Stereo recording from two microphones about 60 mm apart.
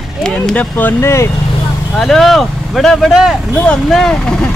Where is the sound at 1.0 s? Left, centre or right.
Left.